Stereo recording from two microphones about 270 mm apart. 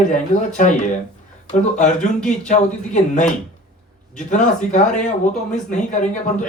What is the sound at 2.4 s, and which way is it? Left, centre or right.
Speech, left.